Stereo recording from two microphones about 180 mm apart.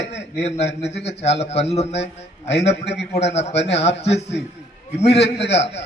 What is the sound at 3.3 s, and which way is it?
Speech, 35° left (ahead or behind).